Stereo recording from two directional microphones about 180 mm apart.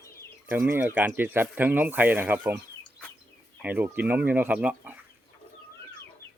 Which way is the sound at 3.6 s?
10° right (ahead or behind).